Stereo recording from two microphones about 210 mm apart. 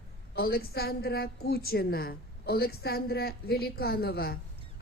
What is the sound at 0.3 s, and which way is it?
A woman's voice, 45° left (ahead or behind).